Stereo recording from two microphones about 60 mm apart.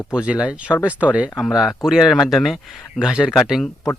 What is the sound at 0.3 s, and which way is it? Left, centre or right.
Speech, centre.